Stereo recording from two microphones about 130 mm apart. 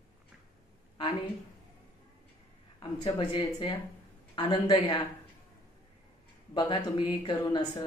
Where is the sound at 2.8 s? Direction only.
40° left (ahead or behind).